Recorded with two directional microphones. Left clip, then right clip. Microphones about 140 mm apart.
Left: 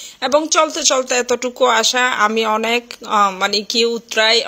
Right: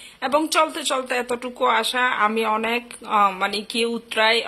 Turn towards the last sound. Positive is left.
turn(degrees=30)  # may be behind; listen again after turning